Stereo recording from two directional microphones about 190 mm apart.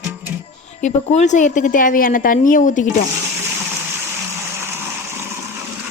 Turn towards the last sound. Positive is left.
turn(degrees=-10)  # may be behind; listen again after turning